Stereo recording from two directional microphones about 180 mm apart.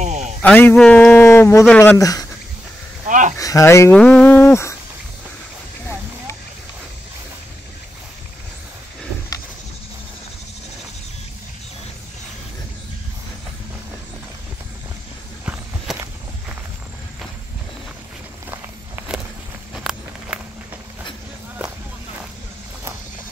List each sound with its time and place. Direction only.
0.0 s a sound: 40° right (ahead or behind)
0.4 s speech: 10° left (ahead or behind)
3.1 s speech: 45° right (ahead or behind)
3.3 s speech: 20° left (ahead or behind)
15.4 s walk: 10° right (ahead or behind)
18.5 s walk: 10° right (ahead or behind)